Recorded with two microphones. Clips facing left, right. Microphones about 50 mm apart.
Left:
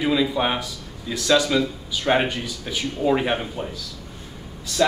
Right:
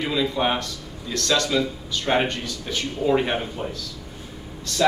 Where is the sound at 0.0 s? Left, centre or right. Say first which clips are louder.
Left 2 dB; centre.